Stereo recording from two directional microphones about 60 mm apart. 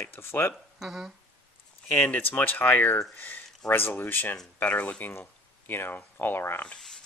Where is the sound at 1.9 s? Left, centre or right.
Left.